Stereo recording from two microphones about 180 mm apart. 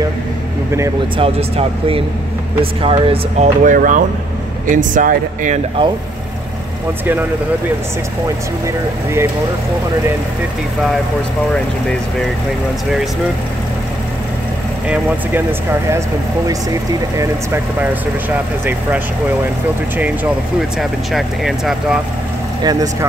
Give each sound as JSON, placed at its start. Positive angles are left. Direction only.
{"t": 1.1, "sound": "speech", "side_deg": -30}
{"t": 14.9, "sound": "speech", "side_deg": -10}
{"t": 21.1, "sound": "speech", "side_deg": 0}
{"t": 22.6, "sound": "speech", "side_deg": -20}